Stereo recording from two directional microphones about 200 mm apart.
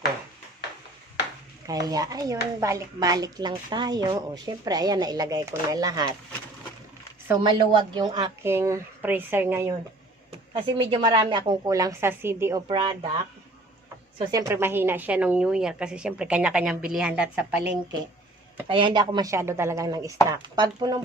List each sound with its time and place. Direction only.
1.6 s speech: 20° right (ahead or behind)
7.7 s a woman's voice: 25° right (ahead or behind)
10.3 s speech: 25° right (ahead or behind)
12.6 s speech: 25° right (ahead or behind)
14.2 s a woman's voice: 20° right (ahead or behind)
18.7 s a woman's voice: 25° right (ahead or behind)